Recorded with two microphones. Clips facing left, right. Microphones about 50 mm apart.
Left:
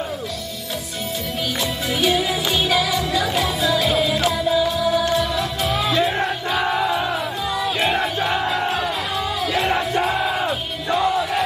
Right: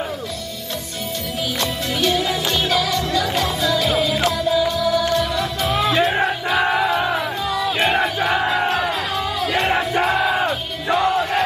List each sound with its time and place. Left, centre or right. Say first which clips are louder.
1.6 s music: even; centre
6.1 s music: right 3 dB; centre
6.9 s crowd: right 2 dB; centre
7.5 s battle cry: right 2 dB; centre
7.9 s battle cry: right 2 dB; centre
8.6 s music: right 2 dB; centre
9.7 s music: right 2 dB; centre